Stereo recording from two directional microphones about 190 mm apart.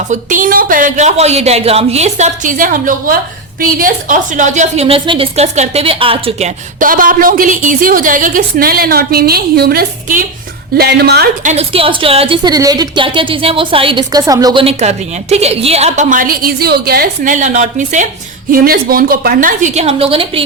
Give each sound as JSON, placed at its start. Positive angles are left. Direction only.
{"t": 0.1, "sound": "a woman's voice", "side_deg": -45}
{"t": 6.7, "sound": "a woman's voice", "side_deg": -45}
{"t": 11.4, "sound": "a woman's voice", "side_deg": -30}
{"t": 14.6, "sound": "a woman's voice", "side_deg": -35}
{"t": 18.5, "sound": "a woman's voice", "side_deg": -50}